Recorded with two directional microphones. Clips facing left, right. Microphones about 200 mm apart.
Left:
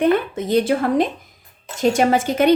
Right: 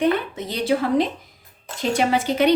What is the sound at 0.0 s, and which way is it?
Speech, 50° left (ahead or behind).